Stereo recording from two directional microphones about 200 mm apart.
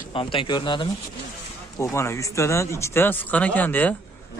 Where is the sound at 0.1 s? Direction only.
25° left (ahead or behind).